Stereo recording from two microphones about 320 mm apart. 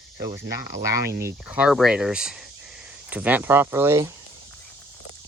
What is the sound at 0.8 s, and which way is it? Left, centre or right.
Speech, centre.